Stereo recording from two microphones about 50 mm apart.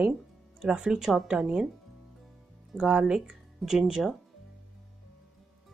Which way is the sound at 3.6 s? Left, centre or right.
Centre.